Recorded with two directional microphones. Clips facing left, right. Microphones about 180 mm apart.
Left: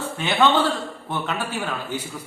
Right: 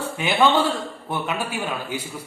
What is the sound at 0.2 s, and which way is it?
A man's voice, 10° right (ahead or behind).